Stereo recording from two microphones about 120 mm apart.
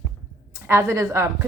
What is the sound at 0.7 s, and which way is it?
Speech, 25° right (ahead or behind).